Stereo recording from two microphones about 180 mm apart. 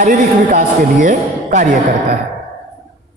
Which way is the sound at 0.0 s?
50° right (ahead or behind).